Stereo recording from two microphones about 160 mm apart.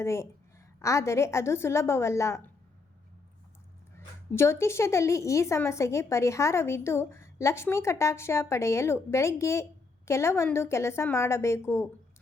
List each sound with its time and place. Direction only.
0.0 s a woman's voice: 15° left (ahead or behind)
3.9 s a woman's voice: 15° left (ahead or behind)